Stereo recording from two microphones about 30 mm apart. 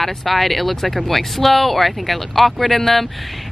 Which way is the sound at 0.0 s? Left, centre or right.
Centre.